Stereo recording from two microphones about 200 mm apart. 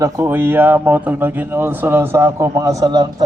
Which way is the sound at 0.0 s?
15° right (ahead or behind).